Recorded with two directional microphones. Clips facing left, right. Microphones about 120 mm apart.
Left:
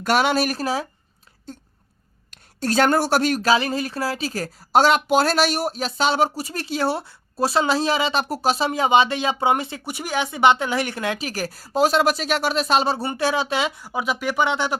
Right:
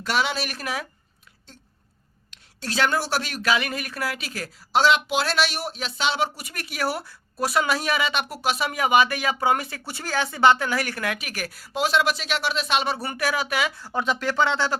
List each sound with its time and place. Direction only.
0.0 s speech: 50° left (ahead or behind)
0.5 s speech: 30° left (ahead or behind)
2.3 s speech: 45° left (ahead or behind); by 13.8 s 25° left (ahead or behind)
13.8 s speech: 10° left (ahead or behind)